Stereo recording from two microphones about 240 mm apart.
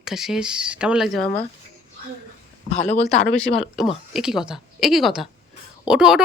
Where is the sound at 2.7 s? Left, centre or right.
Left.